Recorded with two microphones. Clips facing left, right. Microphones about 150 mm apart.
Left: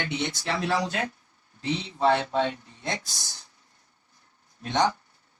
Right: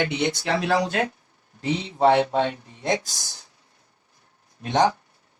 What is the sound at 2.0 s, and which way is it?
Speech, 70° right (ahead or behind).